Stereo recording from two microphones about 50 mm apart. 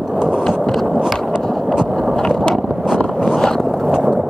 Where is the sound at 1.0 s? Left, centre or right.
Centre.